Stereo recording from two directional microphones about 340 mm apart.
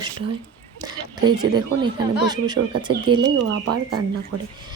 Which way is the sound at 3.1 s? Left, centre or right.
Right.